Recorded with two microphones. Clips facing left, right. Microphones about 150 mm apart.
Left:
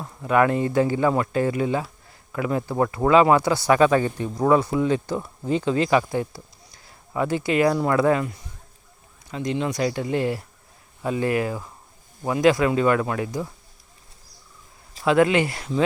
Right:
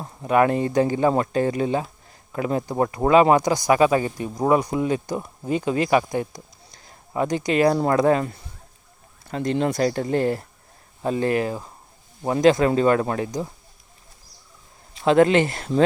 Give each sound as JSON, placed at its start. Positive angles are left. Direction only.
{"t": 0.0, "sound": "speech", "side_deg": -25}
{"t": 6.8, "sound": "a sound", "side_deg": -25}
{"t": 7.4, "sound": "speech", "side_deg": -30}
{"t": 9.3, "sound": "speech", "side_deg": -45}
{"t": 15.0, "sound": "speech", "side_deg": -30}
{"t": 15.5, "sound": "speech", "side_deg": -45}